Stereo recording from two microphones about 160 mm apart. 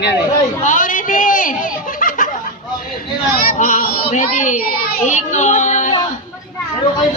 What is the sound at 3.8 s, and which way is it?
Speech, 60° left (ahead or behind).